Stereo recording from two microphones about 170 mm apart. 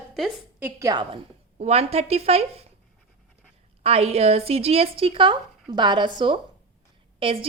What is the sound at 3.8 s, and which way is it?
A woman's voice, 35° right (ahead or behind).